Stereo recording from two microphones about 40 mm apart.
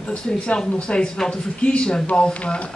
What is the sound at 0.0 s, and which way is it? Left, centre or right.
A man's voice, left.